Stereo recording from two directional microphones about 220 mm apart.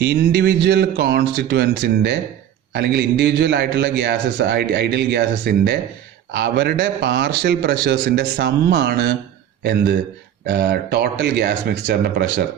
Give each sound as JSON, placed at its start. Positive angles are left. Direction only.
{"t": 0.0, "sound": "a man's voice", "side_deg": -50}